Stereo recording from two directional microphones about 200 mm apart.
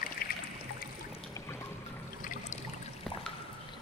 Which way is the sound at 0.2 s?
45° left (ahead or behind).